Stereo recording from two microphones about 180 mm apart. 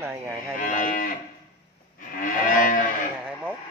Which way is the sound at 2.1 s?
45° left (ahead or behind).